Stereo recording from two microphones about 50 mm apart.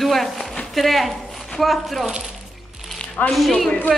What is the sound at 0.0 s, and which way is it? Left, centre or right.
A woman's voice, centre.